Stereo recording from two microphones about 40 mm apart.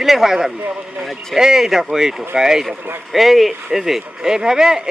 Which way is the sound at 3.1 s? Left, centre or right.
Centre.